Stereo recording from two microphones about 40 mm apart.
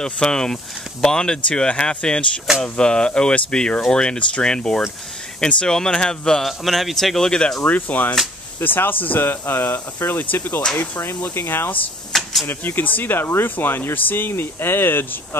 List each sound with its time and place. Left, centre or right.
0.0 s speech: centre
6.4 s speech: centre
7.2 s speech: centre
7.6 s speech: left
8.5 s speech: left
10.3 s speech: left
11.3 s speech: left
12.1 s a sound: centre
12.4 s speech: left
13.9 s speech: left